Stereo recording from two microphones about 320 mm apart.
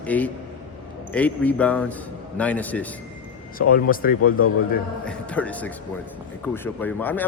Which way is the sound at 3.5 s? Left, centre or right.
Left.